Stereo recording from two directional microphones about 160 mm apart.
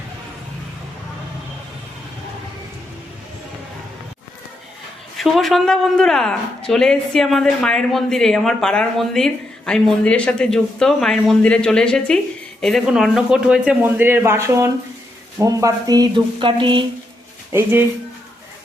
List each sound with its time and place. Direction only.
5.1 s a man's voice: centre (ahead or behind); by 16.8 s 30° right (ahead or behind)
17.5 s a man's voice: 15° right (ahead or behind)